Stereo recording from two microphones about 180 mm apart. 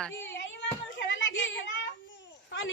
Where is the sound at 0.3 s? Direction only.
90° left.